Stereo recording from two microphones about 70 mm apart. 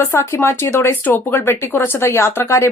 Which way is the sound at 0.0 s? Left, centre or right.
Left.